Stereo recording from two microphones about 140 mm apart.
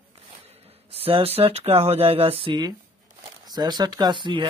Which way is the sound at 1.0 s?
45° right (ahead or behind).